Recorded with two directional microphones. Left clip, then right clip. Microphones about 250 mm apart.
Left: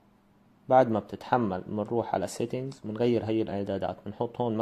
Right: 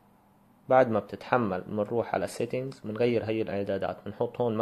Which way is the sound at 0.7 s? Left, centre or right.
Centre.